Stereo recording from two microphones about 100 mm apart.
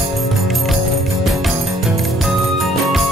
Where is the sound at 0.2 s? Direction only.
Centre (ahead or behind).